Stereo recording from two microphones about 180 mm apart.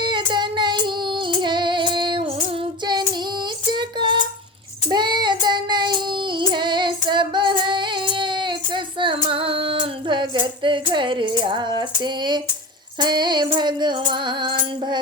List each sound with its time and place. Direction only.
0.0 s female singing: 25° right (ahead or behind)
3.7 s a sound: 25° right (ahead or behind)
4.9 s child singing: 25° right (ahead or behind)
13.0 s music: 25° right (ahead or behind)